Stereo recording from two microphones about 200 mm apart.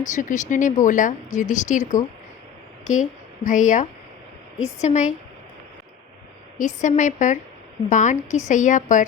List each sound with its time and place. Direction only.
0.0 s speech: 40° left (ahead or behind)
2.8 s speech: 35° left (ahead or behind)
6.6 s speech: 40° left (ahead or behind)